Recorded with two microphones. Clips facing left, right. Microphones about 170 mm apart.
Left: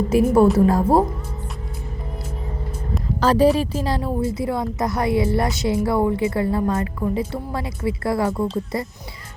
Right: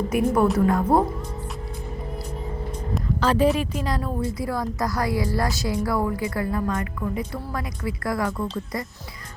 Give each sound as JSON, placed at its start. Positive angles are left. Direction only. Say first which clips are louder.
{"t": 0.1, "sound": "a woman's voice", "louder": "left 6 dB", "side_deg": 30}
{"t": 3.2, "sound": "a woman's voice", "louder": "left 4 dB", "side_deg": 35}